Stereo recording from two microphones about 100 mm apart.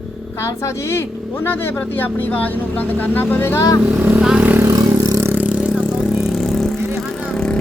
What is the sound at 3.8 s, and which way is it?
Speech, 15° right (ahead or behind).